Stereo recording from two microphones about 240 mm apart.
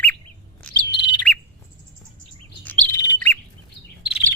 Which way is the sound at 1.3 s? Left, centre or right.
Centre.